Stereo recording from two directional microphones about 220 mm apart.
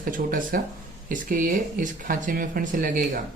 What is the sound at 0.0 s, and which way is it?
Speech, 40° right (ahead or behind).